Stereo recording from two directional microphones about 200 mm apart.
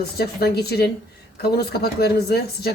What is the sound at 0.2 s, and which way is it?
Speech, 50° left (ahead or behind).